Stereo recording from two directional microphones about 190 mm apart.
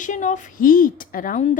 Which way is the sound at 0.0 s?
40° left (ahead or behind).